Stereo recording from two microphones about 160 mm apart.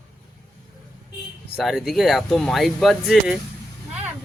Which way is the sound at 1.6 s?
Centre (ahead or behind).